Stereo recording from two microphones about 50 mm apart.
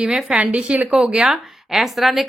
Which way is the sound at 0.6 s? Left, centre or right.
Right.